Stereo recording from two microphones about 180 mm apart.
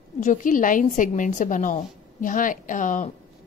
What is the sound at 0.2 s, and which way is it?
A woman's voice, 45° left (ahead or behind).